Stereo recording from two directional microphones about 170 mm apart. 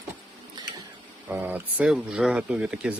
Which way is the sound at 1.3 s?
10° right (ahead or behind).